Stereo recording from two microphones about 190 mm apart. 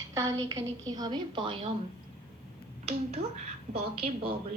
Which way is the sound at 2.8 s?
35° right (ahead or behind).